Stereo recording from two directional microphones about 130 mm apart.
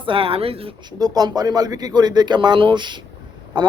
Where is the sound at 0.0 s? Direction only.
45° right (ahead or behind).